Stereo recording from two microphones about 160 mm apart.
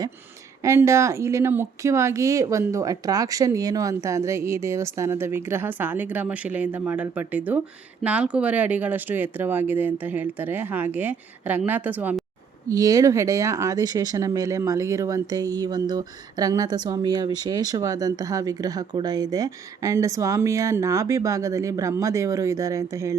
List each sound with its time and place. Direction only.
0.6 s speech: 15° right (ahead or behind)
12.6 s speech: 20° right (ahead or behind)